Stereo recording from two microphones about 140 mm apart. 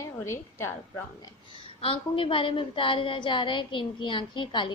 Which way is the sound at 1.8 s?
40° left (ahead or behind).